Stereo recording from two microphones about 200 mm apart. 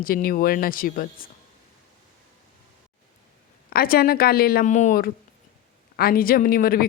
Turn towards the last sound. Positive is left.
turn(degrees=45)  # may be behind; listen again after turning